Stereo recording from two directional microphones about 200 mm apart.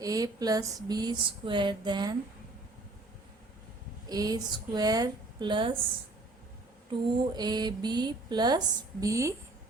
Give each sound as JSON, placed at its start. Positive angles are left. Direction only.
{"t": 0.0, "sound": "speech", "side_deg": -20}
{"t": 4.1, "sound": "speech", "side_deg": -20}
{"t": 7.1, "sound": "speech", "side_deg": -20}